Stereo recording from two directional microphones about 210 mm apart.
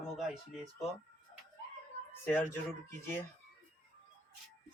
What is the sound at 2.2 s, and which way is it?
Speech, 10° left (ahead or behind).